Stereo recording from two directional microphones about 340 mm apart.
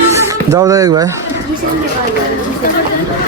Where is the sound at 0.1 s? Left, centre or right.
Centre.